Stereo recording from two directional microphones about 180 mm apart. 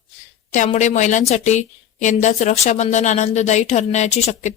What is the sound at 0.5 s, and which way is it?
A woman's voice, 45° left (ahead or behind).